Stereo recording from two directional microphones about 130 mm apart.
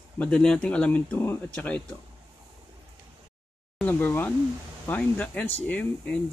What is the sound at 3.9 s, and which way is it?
Speech, 15° left (ahead or behind).